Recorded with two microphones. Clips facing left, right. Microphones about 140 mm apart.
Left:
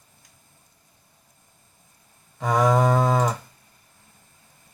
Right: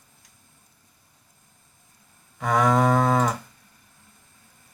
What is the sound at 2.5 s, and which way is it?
Moo, 5° left (ahead or behind).